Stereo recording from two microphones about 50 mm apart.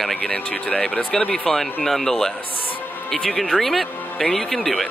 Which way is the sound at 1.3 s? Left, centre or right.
Centre.